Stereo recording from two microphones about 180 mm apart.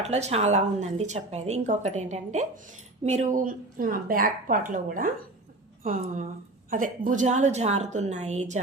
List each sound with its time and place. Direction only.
0.0 s speech: 35° right (ahead or behind)